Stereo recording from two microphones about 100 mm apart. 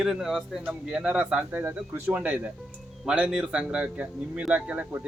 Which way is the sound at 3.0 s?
10° right (ahead or behind).